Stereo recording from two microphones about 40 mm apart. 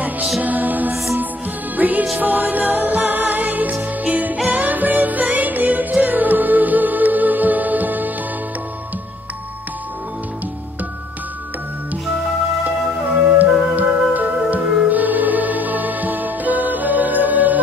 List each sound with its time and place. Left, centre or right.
0.4 s music: right
13.4 s music: right